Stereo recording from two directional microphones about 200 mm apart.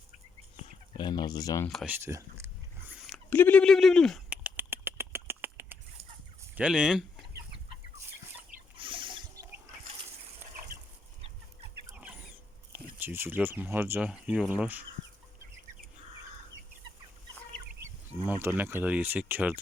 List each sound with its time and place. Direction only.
0.5 s speech: 25° left (ahead or behind)
1.7 s speech: centre (ahead or behind)
2.4 s a sound: 15° right (ahead or behind)
3.2 s bird: 10° left (ahead or behind); by 5.7 s 10° right (ahead or behind)
6.6 s speech: 5° right (ahead or behind)
8.8 s a sound: 25° right (ahead or behind)
12.7 s speech: 10° right (ahead or behind)
18.3 s speech: 10° right (ahead or behind)